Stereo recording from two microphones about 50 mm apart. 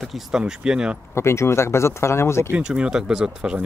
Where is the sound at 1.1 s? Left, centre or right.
Left.